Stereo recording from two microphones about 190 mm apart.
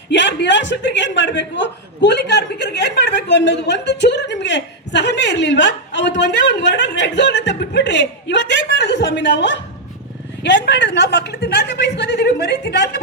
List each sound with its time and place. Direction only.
0.1 s a man's voice: 70° left (ahead or behind)